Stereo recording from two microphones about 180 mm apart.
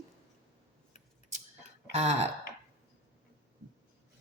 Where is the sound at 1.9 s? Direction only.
35° right (ahead or behind).